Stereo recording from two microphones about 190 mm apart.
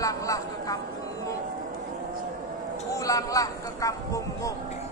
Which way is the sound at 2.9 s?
15° left (ahead or behind).